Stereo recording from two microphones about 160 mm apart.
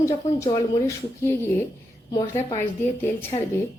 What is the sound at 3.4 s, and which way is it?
Speech, 40° left (ahead or behind).